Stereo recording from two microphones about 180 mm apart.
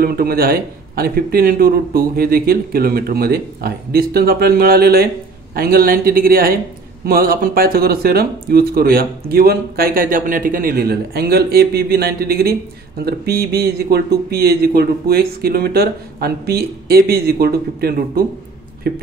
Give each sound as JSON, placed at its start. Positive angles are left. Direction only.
{"t": 0.0, "sound": "speech", "side_deg": -55}